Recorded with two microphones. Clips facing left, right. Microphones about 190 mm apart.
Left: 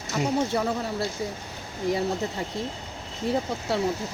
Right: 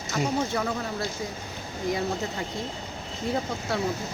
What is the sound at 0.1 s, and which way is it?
Speech, 10° left (ahead or behind).